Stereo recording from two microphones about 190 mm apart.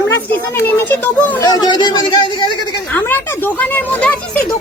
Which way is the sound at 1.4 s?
20° left (ahead or behind).